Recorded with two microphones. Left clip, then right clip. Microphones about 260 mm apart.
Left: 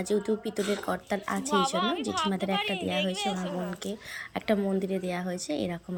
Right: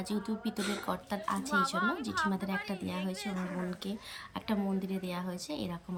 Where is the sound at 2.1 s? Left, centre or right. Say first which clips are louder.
Left 5 dB; centre.